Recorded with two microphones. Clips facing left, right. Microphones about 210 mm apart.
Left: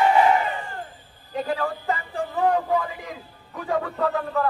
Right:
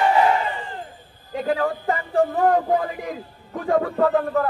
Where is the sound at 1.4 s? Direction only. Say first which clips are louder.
Right 4 dB; 50° right (ahead or behind).